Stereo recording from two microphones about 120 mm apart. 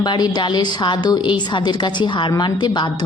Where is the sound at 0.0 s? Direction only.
35° left (ahead or behind).